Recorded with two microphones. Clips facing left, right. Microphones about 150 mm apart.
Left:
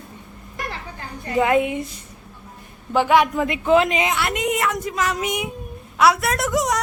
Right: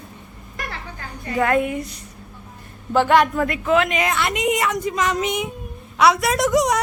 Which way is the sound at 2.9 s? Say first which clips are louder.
Right 1 dB; 10° left (ahead or behind).